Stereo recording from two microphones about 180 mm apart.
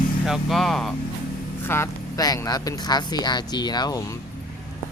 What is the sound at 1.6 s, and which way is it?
Speech, 15° left (ahead or behind).